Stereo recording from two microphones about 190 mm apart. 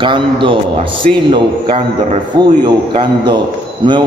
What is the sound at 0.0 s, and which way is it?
A man's voice, 25° right (ahead or behind).